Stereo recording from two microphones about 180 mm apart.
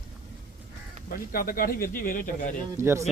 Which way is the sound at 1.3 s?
55° left (ahead or behind).